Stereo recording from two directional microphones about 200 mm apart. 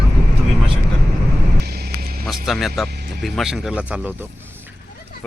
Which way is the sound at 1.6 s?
50° right (ahead or behind).